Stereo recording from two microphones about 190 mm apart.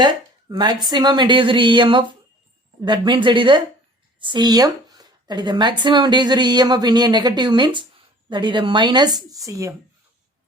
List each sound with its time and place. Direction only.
0.0 s speech: 20° right (ahead or behind)